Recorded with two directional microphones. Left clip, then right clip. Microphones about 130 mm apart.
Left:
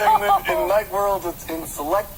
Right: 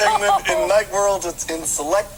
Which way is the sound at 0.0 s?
30° right (ahead or behind).